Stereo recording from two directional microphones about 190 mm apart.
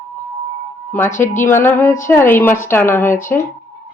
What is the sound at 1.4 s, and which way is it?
A woman's voice, 10° left (ahead or behind).